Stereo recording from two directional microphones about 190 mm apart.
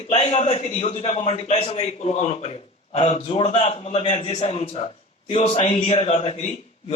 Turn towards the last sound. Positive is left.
turn(degrees=35)  # may be behind; listen again after turning